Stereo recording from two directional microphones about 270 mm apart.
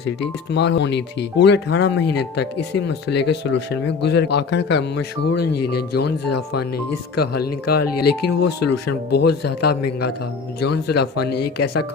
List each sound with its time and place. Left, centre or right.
0.0 s speech: left
5.2 s speech: left
7.2 s speech: left
11.3 s speech: left
11.6 s speech: left